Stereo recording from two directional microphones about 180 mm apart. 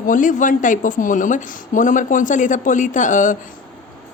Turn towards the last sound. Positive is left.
turn(degrees=45)  # may be behind; listen again after turning